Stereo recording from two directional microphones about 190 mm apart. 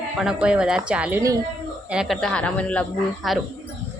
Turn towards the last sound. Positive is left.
turn(degrees=5)  # may be behind; listen again after turning